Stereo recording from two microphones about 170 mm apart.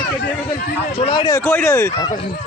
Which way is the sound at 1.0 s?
25° left (ahead or behind).